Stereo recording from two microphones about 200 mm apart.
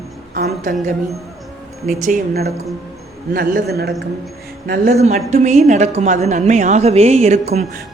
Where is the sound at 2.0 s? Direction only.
45° right (ahead or behind).